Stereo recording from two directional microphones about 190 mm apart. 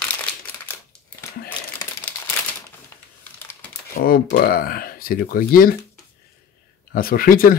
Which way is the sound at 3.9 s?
50° left (ahead or behind).